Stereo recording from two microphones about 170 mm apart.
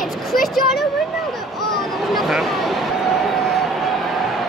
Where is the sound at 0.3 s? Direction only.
Centre (ahead or behind).